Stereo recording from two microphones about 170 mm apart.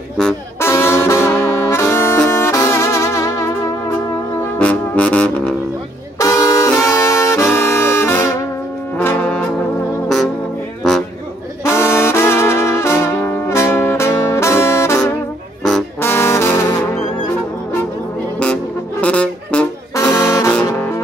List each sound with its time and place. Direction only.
0.6 s brass instrument: 15° left (ahead or behind)
2.2 s music: 15° left (ahead or behind)
4.6 s brass instrument: 5° left (ahead or behind)
6.1 s brass instrument: 20° left (ahead or behind)
8.9 s trombone: 10° left (ahead or behind)
10.0 s music: centre (ahead or behind)
11.6 s brass instrument: 15° left (ahead or behind)
16.0 s brass instrument: 15° left (ahead or behind)
18.4 s music: 5° left (ahead or behind)
20.0 s brass instrument: 20° left (ahead or behind)
20.5 s music: 10° left (ahead or behind)